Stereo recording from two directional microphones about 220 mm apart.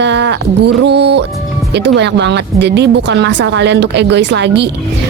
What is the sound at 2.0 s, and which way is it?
A woman's voice, 50° right (ahead or behind).